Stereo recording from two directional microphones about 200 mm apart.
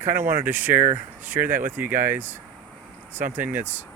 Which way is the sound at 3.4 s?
10° right (ahead or behind).